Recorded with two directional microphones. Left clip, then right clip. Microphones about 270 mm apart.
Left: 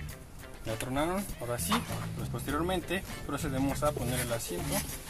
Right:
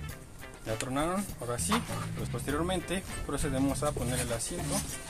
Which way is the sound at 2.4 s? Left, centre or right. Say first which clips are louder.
Even; right.